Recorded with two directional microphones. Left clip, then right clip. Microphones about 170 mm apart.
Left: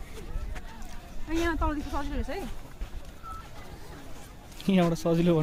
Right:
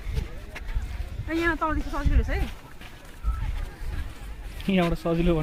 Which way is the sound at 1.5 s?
20° left (ahead or behind).